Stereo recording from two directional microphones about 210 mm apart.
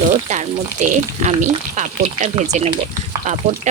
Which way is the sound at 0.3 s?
35° right (ahead or behind).